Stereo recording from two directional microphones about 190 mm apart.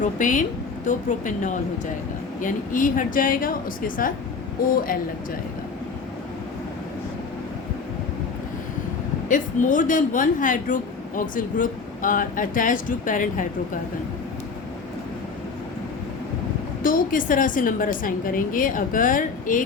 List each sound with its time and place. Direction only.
0.0 s a woman's voice: 40° left (ahead or behind)
9.3 s speech: 45° left (ahead or behind)
16.8 s speech: 45° left (ahead or behind)